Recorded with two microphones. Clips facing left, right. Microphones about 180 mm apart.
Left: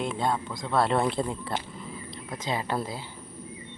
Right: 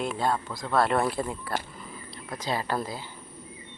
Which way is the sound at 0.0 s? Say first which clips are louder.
Even; 20° left (ahead or behind).